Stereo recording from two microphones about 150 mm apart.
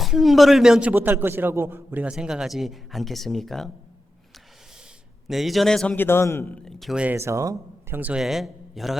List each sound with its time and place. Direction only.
0.0 s a man's voice: centre (ahead or behind)
5.3 s a man's voice: centre (ahead or behind)
6.0 s a man's voice: 15° left (ahead or behind)
6.7 s speech: centre (ahead or behind)